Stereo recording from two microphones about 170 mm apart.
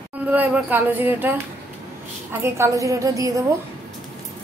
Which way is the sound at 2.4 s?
15° right (ahead or behind).